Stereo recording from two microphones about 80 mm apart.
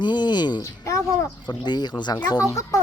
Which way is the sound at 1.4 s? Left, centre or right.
Left.